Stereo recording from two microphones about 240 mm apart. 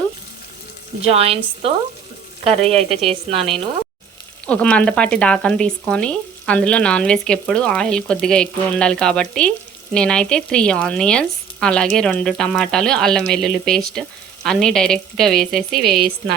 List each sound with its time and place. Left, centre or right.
1.1 s a woman's voice: right
4.4 s speech: centre